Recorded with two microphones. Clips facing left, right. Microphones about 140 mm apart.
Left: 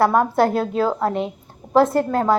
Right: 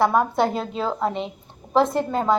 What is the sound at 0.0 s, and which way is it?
A woman's voice, 5° left (ahead or behind).